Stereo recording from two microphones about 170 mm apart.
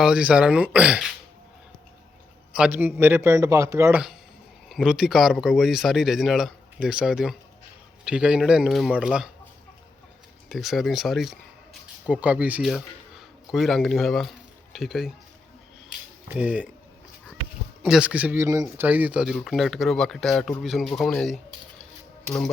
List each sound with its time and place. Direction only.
0.0 s a man's voice: 5° right (ahead or behind)
2.6 s a man's voice: 10° right (ahead or behind)
4.7 s speech: 5° right (ahead or behind)
10.5 s speech: centre (ahead or behind)
15.9 s a sound: 10° right (ahead or behind)
17.8 s speech: 5° right (ahead or behind)